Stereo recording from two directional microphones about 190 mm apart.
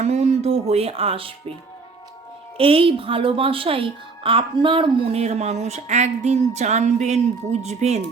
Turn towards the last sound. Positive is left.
turn(degrees=-35)  # may be behind; listen again after turning